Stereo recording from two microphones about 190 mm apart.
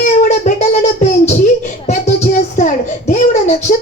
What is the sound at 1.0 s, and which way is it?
Music, 35° left (ahead or behind).